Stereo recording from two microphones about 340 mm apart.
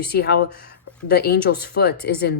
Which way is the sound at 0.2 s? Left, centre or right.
Left.